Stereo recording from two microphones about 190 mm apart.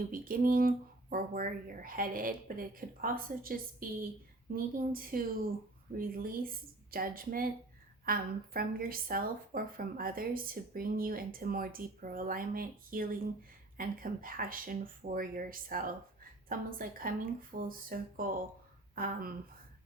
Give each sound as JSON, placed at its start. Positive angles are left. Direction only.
{"t": 0.1, "sound": "speech", "side_deg": -45}